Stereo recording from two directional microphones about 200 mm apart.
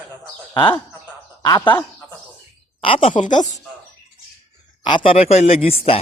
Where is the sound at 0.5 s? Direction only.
25° left (ahead or behind).